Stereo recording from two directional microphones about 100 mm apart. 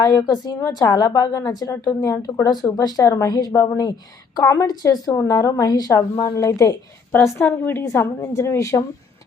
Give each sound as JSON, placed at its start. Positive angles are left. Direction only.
{"t": 0.0, "sound": "a woman's voice", "side_deg": 40}
{"t": 7.1, "sound": "a woman's voice", "side_deg": 20}